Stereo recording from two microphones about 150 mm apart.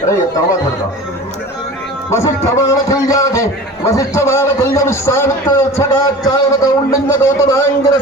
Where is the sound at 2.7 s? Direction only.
20° left (ahead or behind).